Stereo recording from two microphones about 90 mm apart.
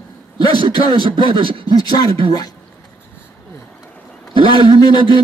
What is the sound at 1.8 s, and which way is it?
Speech, 50° left (ahead or behind).